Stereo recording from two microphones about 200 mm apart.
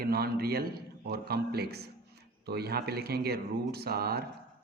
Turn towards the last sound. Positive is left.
turn(degrees=-50)  # may be behind; listen again after turning